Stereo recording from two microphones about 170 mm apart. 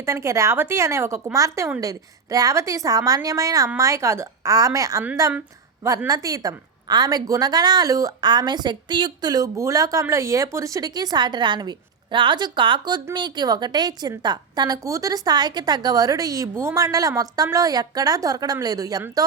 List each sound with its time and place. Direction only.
0.0 s a woman's voice: 15° right (ahead or behind)